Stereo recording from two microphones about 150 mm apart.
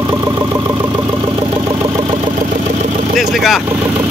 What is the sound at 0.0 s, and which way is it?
Vehicle, 25° right (ahead or behind).